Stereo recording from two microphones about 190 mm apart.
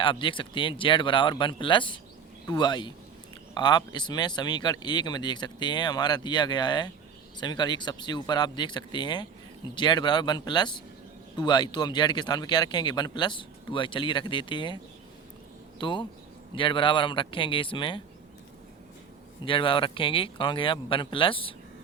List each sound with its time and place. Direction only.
0.0 s speech: 25° left (ahead or behind)
15.8 s speech: 25° left (ahead or behind)
19.5 s speech: 25° left (ahead or behind)